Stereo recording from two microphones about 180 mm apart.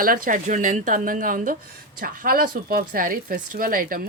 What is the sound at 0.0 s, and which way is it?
Speech, 50° right (ahead or behind).